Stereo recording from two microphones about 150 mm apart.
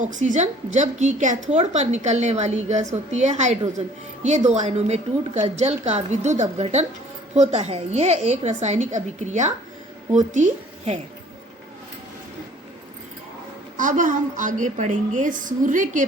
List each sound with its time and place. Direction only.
0.0 s a woman's voice: 55° right (ahead or behind)
13.7 s a woman's voice: 60° right (ahead or behind)